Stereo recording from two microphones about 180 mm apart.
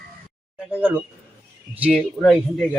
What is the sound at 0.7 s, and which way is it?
A man's voice, 10° right (ahead or behind).